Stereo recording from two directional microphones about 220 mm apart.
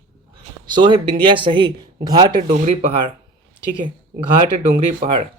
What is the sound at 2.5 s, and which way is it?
Speech, 30° right (ahead or behind).